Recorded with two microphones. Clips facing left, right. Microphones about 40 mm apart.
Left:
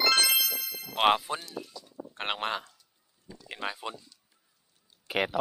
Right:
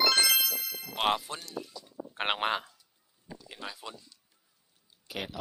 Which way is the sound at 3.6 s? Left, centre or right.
Left.